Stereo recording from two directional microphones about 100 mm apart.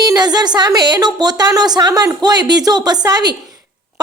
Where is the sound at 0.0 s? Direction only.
40° right (ahead or behind).